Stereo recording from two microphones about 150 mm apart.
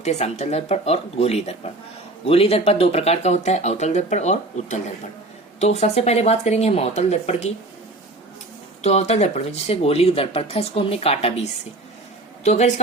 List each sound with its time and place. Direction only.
0.0 s speech: 45° left (ahead or behind)
8.8 s speech: 45° left (ahead or behind)
12.4 s speech: 50° left (ahead or behind)